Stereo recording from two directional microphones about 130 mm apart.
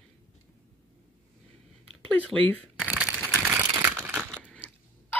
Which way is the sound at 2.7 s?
10° right (ahead or behind).